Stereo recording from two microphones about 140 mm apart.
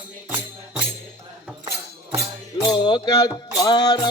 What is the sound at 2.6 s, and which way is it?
Music, 35° left (ahead or behind).